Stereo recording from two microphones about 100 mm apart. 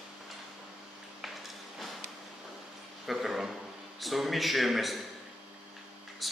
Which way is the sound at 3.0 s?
Centre (ahead or behind).